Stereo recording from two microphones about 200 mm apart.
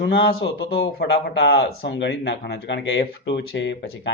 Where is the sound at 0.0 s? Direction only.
55° left (ahead or behind).